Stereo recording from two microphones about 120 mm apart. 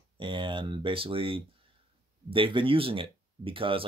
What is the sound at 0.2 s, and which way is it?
Speech, 45° right (ahead or behind).